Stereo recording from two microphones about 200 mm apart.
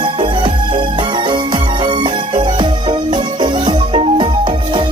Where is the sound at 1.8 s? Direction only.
25° right (ahead or behind).